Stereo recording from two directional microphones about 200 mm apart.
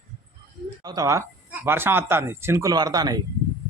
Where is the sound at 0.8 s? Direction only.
20° right (ahead or behind).